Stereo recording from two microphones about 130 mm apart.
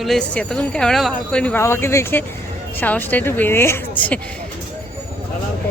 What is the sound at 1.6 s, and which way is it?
Speech, 20° left (ahead or behind).